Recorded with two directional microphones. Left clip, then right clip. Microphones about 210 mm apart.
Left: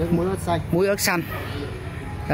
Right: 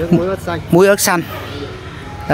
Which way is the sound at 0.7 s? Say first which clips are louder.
Right 12 dB; 25° right (ahead or behind).